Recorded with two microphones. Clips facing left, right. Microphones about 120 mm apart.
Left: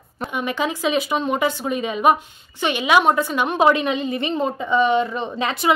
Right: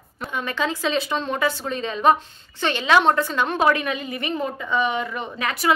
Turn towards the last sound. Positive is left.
turn(degrees=25)  # may be behind; listen again after turning